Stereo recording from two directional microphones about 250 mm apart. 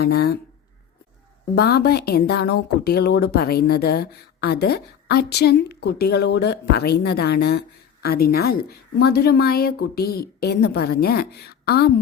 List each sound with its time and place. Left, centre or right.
0.0 s speech: left
1.5 s speech: left